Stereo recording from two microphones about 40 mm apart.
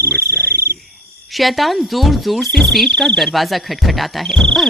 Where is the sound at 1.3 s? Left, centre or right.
Centre.